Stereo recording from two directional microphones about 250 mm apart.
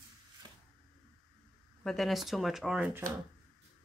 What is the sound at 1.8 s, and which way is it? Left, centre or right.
Speech, centre.